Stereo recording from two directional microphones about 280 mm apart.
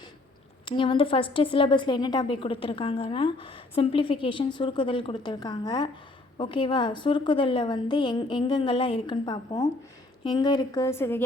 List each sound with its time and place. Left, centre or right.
0.6 s a woman's voice: centre